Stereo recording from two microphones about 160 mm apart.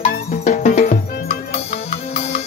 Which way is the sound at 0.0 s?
55° left (ahead or behind).